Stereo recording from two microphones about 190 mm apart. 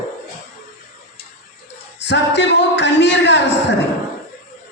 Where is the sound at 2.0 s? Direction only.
65° left (ahead or behind).